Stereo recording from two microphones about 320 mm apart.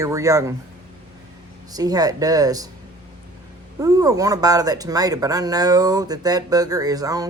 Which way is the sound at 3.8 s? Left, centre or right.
Centre.